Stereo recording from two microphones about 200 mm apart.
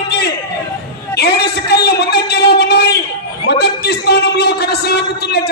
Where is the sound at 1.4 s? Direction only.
55° left (ahead or behind).